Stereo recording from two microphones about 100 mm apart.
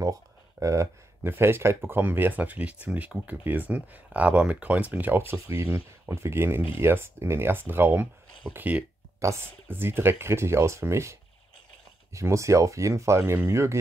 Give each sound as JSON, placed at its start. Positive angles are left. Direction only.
{"t": 0.0, "sound": "speech", "side_deg": -35}